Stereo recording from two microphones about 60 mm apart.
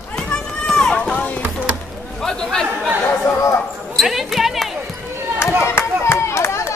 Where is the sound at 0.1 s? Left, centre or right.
Centre.